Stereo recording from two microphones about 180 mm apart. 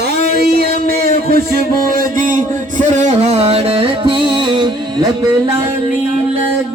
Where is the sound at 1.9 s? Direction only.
45° right (ahead or behind).